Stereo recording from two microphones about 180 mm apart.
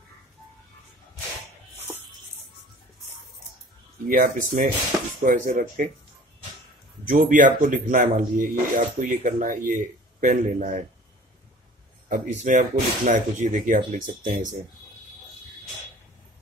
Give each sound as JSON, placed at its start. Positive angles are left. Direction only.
{"t": 4.1, "sound": "speech", "side_deg": -50}
{"t": 7.1, "sound": "speech", "side_deg": -50}
{"t": 12.1, "sound": "speech", "side_deg": -45}